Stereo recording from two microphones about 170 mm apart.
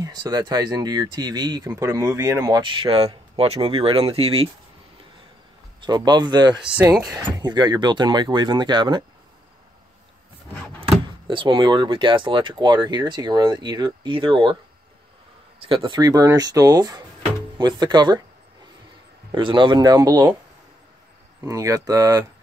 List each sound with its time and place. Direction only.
0.0 s speech: 25° right (ahead or behind)
5.8 s speech: 25° right (ahead or behind)
6.6 s speech: 5° right (ahead or behind)
7.2 s speech: 25° right (ahead or behind)
10.8 s speech: 30° right (ahead or behind)
15.6 s speech: 30° right (ahead or behind)
19.3 s speech: 30° right (ahead or behind)
21.5 s speech: 20° right (ahead or behind)